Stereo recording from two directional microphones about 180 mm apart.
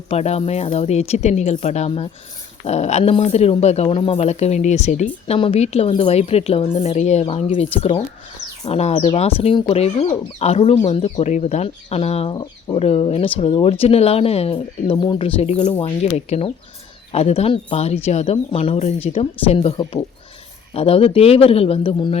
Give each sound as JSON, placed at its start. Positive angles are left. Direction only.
{"t": 0.1, "sound": "speech", "side_deg": 35}